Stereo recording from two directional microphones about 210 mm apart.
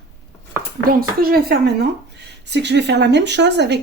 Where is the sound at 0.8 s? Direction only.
45° right (ahead or behind).